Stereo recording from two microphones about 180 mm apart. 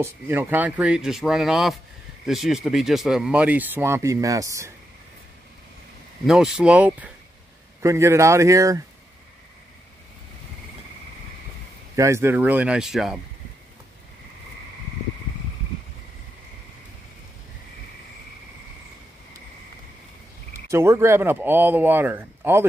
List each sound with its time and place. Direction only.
0.0 s speech: 10° right (ahead or behind)
6.2 s speech: centre (ahead or behind); by 8.8 s 15° right (ahead or behind)
11.9 s speech: 15° right (ahead or behind)
20.7 s speech: 15° right (ahead or behind)